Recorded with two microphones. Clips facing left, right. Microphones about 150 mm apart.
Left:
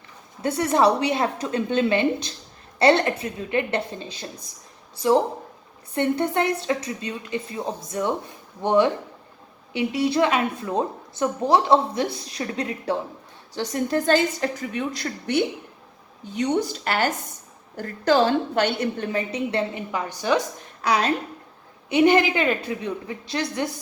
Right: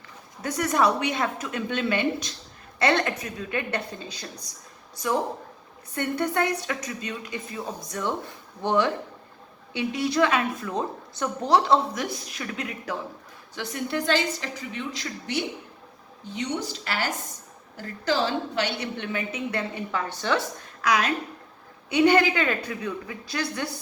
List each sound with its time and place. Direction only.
0.4 s a woman's voice: 30° left (ahead or behind)
5.9 s a woman's voice: 25° left (ahead or behind)
19.9 s a woman's voice: 15° left (ahead or behind)
20.8 s a woman's voice: 30° left (ahead or behind)